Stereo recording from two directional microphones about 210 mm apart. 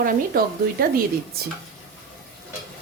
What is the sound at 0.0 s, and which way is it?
Speech, 45° right (ahead or behind).